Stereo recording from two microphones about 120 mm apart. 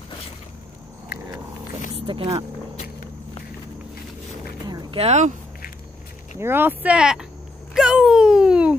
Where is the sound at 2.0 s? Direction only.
45° right (ahead or behind).